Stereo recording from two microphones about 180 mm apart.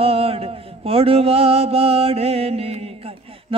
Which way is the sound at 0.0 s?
35° right (ahead or behind).